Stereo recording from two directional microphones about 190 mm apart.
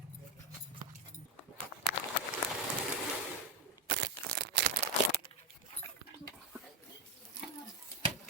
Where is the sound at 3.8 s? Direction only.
60° right (ahead or behind).